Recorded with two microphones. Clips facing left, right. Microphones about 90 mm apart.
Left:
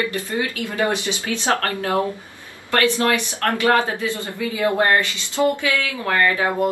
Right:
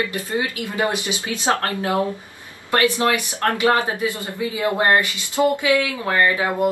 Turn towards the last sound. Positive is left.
turn(degrees=-20)  # may be behind; listen again after turning